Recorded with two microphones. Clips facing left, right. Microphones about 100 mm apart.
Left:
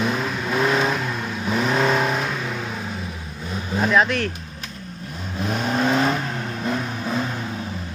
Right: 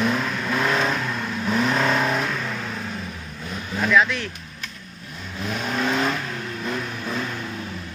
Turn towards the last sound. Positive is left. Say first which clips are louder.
# left 3 dB
turn(degrees=30)  # may be behind; listen again after turning